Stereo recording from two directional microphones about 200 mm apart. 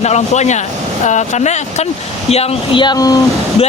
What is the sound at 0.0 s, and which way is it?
Speech, 35° left (ahead or behind).